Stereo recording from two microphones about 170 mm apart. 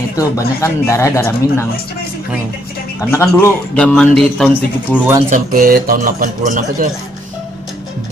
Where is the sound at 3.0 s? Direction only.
15° left (ahead or behind).